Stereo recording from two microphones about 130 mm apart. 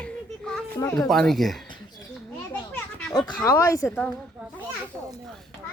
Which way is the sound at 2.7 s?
10° left (ahead or behind).